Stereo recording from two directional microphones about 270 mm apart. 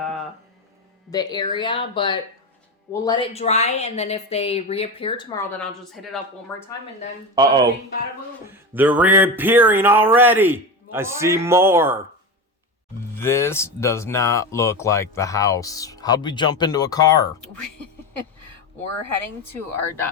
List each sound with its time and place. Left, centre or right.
1.1 s a woman's voice: centre
7.3 s speech: centre
13.1 s speech: centre